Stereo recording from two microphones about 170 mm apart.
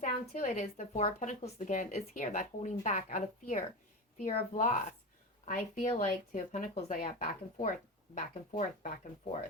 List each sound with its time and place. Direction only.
0.0 s speech: 45° left (ahead or behind)